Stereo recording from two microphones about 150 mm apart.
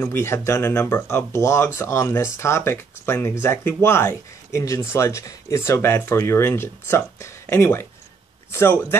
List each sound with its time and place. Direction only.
0.0 s speech: 15° left (ahead or behind)